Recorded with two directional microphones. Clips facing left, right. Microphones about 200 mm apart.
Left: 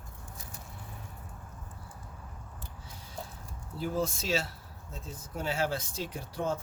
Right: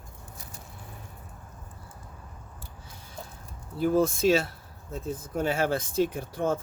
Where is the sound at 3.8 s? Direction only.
55° right (ahead or behind).